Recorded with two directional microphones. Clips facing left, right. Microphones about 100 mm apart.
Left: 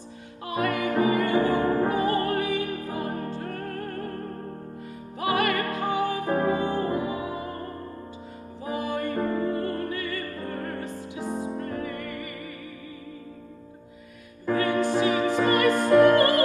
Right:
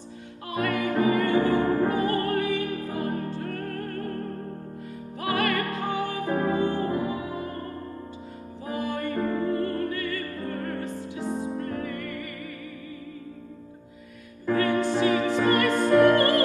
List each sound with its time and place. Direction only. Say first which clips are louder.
0.5 s opera: left 1 dB; 15° left (ahead or behind)
5.2 s music: left 1 dB; 15° left (ahead or behind)
8.6 s music: left 1 dB; 15° left (ahead or behind)
14.4 s music: even; 15° left (ahead or behind)